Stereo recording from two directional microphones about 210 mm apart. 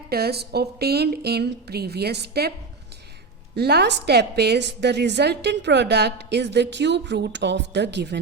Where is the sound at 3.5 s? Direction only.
50° right (ahead or behind).